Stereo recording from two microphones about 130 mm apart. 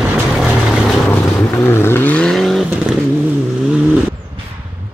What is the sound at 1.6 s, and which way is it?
Vehicle, 20° left (ahead or behind).